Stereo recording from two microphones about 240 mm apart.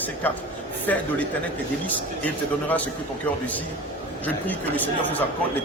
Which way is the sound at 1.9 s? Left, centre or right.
Centre.